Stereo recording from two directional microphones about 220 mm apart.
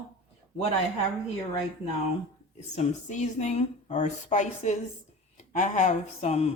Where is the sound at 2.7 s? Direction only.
30° left (ahead or behind).